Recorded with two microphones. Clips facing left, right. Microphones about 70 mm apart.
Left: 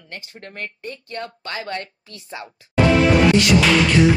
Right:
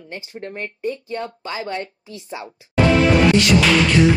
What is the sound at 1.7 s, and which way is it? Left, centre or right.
Speech, centre.